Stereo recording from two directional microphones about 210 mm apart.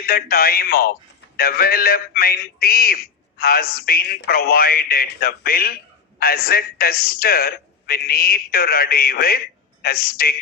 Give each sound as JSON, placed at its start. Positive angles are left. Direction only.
{"t": 0.0, "sound": "a man's voice", "side_deg": 45}